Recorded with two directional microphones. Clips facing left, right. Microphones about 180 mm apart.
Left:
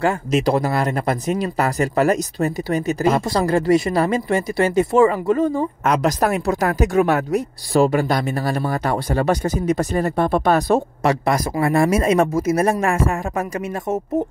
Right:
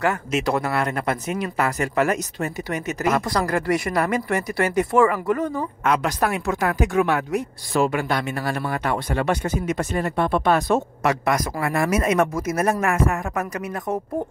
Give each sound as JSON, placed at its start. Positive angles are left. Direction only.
{"t": 0.0, "sound": "speech", "side_deg": 35}
{"t": 5.9, "sound": "speech", "side_deg": 40}